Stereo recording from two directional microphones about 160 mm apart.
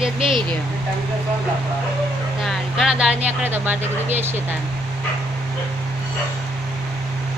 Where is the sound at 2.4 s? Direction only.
5° right (ahead or behind).